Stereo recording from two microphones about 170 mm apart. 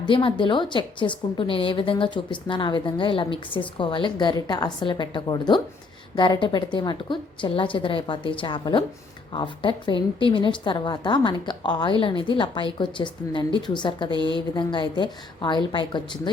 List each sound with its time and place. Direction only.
0.0 s a woman's voice: 30° left (ahead or behind)